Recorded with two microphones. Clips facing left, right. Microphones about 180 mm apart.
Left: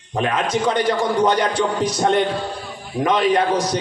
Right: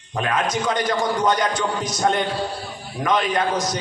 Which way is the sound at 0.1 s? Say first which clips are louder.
Left 2 dB; 30° left (ahead or behind).